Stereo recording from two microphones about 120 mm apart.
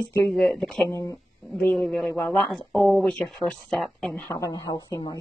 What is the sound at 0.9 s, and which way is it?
Speech, 25° left (ahead or behind).